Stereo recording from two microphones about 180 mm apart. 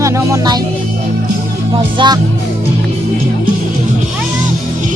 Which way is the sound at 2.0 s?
30° right (ahead or behind).